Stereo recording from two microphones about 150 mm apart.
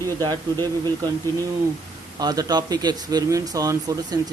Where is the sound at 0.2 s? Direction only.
25° right (ahead or behind).